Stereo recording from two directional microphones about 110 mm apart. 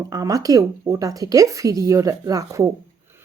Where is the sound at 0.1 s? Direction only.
35° right (ahead or behind).